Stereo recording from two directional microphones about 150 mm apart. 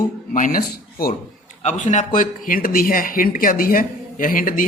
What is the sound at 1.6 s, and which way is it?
A man's voice, 50° left (ahead or behind).